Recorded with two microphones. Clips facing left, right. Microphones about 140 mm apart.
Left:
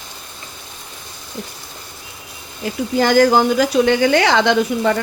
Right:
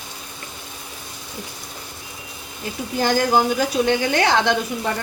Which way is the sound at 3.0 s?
90° left.